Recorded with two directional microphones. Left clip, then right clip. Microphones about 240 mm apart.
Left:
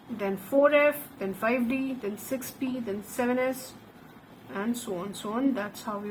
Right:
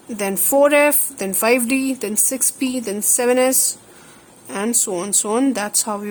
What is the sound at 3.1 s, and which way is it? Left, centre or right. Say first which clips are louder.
Speech: right 12 dB; right.